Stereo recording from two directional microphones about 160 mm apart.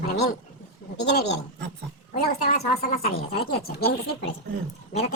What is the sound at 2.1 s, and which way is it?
A woman's voice, 80° left.